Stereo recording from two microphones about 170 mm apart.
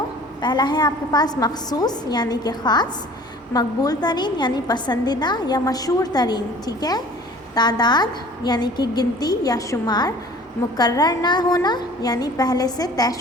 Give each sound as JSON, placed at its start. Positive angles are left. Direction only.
{"t": 0.4, "sound": "a woman's voice", "side_deg": 25}